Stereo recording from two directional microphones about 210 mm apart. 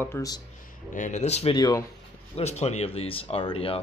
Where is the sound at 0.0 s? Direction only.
15° left (ahead or behind).